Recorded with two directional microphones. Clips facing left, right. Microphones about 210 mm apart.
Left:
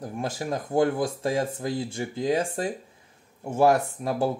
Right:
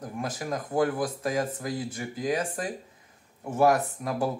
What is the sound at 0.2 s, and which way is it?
Speech, 30° left (ahead or behind).